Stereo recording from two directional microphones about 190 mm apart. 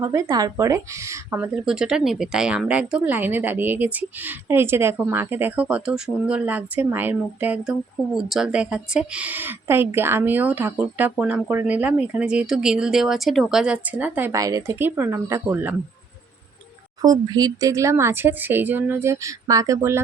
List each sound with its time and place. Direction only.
0.0 s speech: 15° right (ahead or behind)
17.0 s speech: 20° right (ahead or behind)